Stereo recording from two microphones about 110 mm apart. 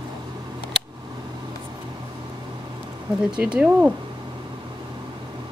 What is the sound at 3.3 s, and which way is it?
Speech, 10° right (ahead or behind).